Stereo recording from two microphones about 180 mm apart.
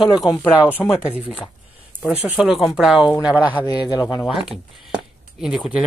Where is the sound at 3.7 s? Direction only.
25° left (ahead or behind).